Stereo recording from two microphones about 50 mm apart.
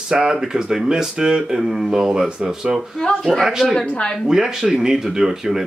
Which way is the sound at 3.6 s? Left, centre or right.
Centre.